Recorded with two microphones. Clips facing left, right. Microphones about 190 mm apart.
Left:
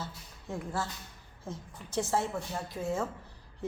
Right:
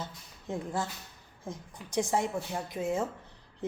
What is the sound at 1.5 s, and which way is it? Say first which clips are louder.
A woman's voice: right 1 dB; 15° right (ahead or behind).